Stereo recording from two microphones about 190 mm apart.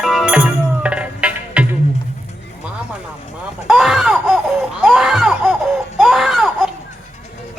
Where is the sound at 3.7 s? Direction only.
Centre (ahead or behind).